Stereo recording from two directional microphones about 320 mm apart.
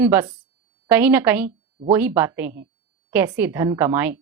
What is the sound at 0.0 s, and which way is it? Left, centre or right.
A woman's voice, centre.